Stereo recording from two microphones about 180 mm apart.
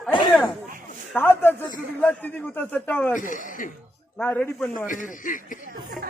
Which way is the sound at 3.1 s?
45° left (ahead or behind).